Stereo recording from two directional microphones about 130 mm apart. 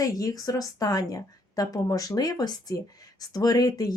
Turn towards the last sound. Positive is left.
turn(degrees=30)  # may be behind; listen again after turning